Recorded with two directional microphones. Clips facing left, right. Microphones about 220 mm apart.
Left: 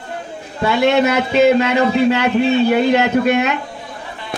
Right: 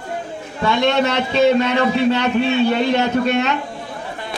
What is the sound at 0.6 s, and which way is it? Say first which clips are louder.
A man's voice: left 3 dB; 5° left (ahead or behind).